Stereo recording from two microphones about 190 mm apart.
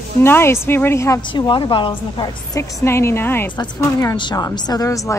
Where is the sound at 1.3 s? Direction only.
25° left (ahead or behind).